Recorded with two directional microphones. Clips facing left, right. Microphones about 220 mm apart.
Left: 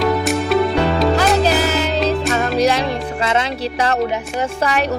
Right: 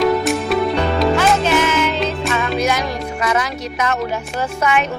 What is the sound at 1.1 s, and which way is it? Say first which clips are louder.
Music: even; 35° left (ahead or behind).